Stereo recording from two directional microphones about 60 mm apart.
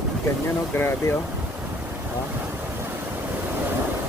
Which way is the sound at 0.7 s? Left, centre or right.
Left.